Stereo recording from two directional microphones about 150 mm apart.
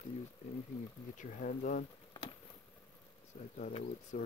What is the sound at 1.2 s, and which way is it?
Speech, 60° left (ahead or behind).